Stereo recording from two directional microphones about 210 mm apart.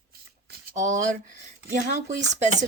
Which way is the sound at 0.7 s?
35° right (ahead or behind).